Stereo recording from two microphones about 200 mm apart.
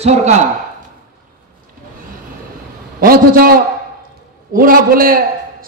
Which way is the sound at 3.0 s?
45° right (ahead or behind).